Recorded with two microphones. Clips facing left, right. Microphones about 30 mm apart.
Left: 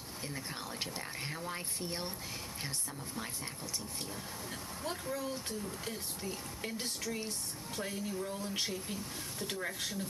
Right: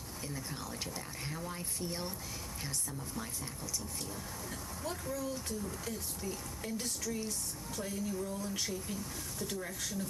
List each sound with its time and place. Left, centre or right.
0.3 s speech: left
5.1 s speech: left